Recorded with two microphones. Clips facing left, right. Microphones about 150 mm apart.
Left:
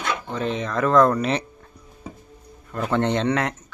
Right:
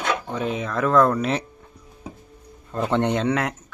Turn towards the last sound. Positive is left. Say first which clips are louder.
# even
turn(degrees=-5)  # may be behind; listen again after turning